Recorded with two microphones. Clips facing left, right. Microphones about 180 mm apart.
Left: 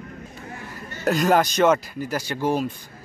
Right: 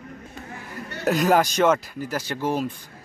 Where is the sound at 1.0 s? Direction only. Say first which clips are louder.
Even; 5° right (ahead or behind).